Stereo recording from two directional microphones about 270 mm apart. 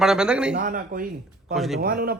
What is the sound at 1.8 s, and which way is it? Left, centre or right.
Speech, right.